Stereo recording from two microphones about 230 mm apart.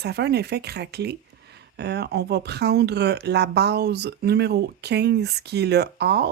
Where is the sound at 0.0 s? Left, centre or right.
Right.